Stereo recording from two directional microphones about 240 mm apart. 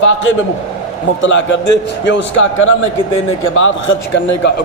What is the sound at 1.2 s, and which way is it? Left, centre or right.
A man's voice, left.